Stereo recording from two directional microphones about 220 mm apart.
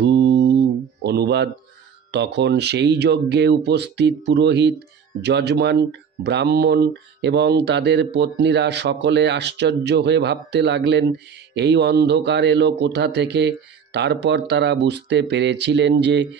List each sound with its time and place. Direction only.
0.0 s mantra: 50° right (ahead or behind)
2.0 s speech: 50° right (ahead or behind)